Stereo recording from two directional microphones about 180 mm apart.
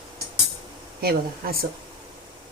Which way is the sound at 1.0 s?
55° right (ahead or behind).